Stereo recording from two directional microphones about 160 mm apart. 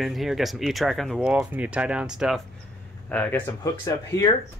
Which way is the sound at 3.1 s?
10° left (ahead or behind).